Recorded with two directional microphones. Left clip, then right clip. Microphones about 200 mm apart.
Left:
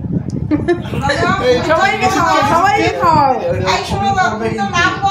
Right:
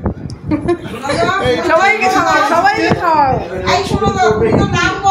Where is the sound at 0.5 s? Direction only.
15° left (ahead or behind).